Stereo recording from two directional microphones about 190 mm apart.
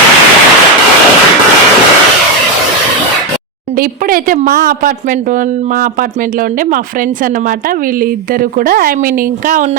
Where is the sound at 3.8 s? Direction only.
50° right (ahead or behind).